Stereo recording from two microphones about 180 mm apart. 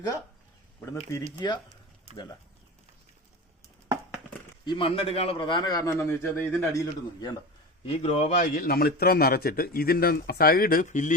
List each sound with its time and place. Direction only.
0.8 s speech: 10° left (ahead or behind)
1.4 s a man's voice: 25° left (ahead or behind)
2.1 s speech: 35° right (ahead or behind)
4.6 s a man's voice: 25° left (ahead or behind)
7.9 s a man's voice: 35° left (ahead or behind)